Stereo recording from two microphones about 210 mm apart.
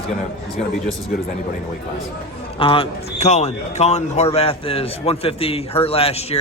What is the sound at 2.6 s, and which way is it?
A man's voice, 25° left (ahead or behind).